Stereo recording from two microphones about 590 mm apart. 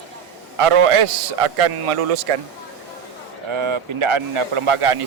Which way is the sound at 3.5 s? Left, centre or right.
Right.